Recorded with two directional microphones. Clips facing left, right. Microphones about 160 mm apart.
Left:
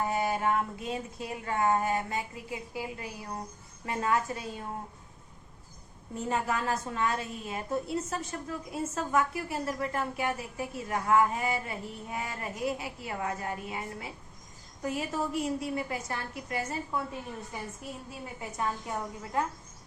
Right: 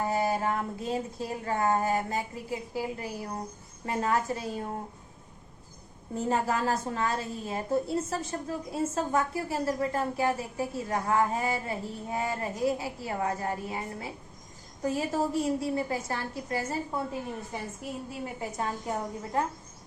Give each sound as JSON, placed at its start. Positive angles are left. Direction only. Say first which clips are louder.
{"t": 0.0, "sound": "a woman's voice", "louder": "right 1 dB", "side_deg": -35}
{"t": 6.1, "sound": "a woman's voice", "louder": "right 3 dB", "side_deg": -35}
{"t": 18.3, "sound": "a woman's voice", "louder": "left 1 dB", "side_deg": -35}